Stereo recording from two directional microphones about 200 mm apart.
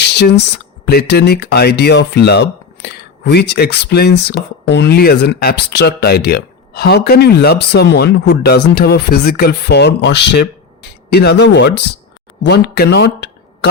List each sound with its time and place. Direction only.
0.0 s speech: 55° left (ahead or behind)